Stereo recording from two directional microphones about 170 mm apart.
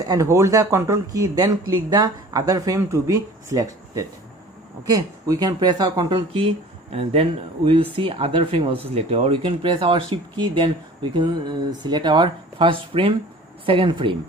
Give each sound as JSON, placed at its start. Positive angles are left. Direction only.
{"t": 0.0, "sound": "speech", "side_deg": -20}
{"t": 4.9, "sound": "speech", "side_deg": -20}
{"t": 6.9, "sound": "speech", "side_deg": -40}